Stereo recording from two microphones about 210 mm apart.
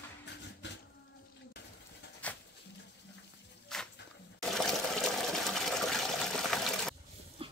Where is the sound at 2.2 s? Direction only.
5° left (ahead or behind).